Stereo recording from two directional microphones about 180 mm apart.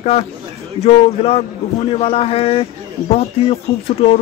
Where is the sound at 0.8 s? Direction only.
35° left (ahead or behind).